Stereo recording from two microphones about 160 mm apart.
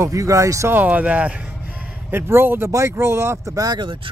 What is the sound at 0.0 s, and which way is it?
Speech, 20° right (ahead or behind).